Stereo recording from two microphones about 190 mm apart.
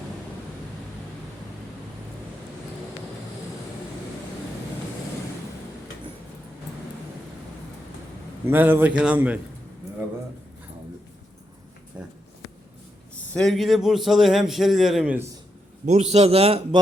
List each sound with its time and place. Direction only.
8.4 s a man's voice: 10° right (ahead or behind)
12.0 s a sound: 5° right (ahead or behind)
13.3 s a man's voice: centre (ahead or behind)
15.9 s a man's voice: 35° right (ahead or behind)